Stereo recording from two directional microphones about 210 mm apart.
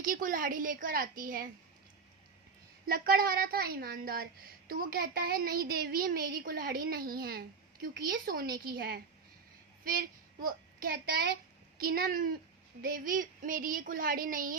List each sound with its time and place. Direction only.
0.0 s speech: 40° right (ahead or behind)
2.8 s a woman's voice: 45° right (ahead or behind)